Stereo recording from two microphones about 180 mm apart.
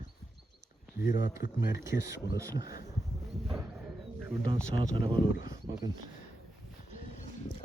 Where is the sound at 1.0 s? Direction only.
50° left (ahead or behind).